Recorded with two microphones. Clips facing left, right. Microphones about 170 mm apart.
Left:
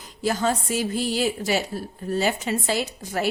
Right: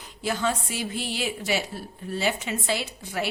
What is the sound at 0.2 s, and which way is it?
A woman's voice, 40° left (ahead or behind).